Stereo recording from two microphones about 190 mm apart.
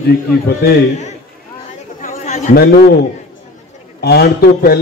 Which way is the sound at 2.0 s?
45° left (ahead or behind).